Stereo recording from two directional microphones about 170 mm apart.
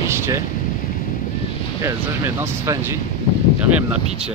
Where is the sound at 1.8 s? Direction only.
20° right (ahead or behind).